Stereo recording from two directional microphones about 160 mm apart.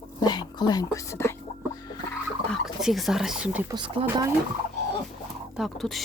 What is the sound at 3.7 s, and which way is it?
Speech, 30° right (ahead or behind).